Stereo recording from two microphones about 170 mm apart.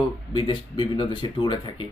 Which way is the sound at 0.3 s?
25° left (ahead or behind).